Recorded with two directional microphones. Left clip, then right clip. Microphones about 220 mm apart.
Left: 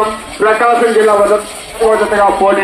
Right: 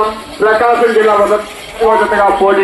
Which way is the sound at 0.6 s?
35° left (ahead or behind).